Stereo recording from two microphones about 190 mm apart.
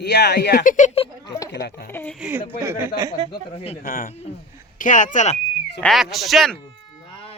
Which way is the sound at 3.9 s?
45° left (ahead or behind).